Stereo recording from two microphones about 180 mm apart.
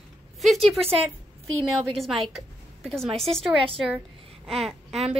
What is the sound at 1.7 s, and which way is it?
A woman's voice, centre (ahead or behind).